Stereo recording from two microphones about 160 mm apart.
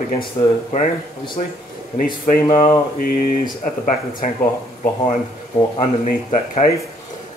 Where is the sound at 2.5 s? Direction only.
40° left (ahead or behind).